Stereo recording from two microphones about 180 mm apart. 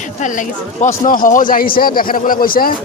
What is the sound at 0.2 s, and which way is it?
Speech, 40° left (ahead or behind).